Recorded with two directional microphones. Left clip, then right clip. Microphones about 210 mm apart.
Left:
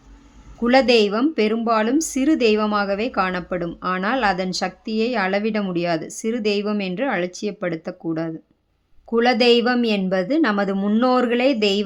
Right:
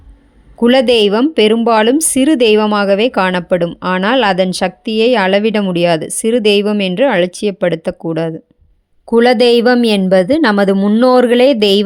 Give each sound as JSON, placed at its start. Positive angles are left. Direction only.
{"t": 0.6, "sound": "speech", "side_deg": -40}